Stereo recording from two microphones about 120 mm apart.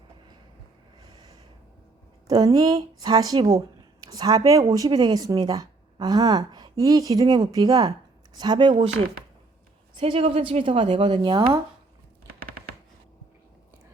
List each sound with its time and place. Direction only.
2.2 s a woman's voice: 30° right (ahead or behind)
10.0 s a woman's voice: 55° right (ahead or behind)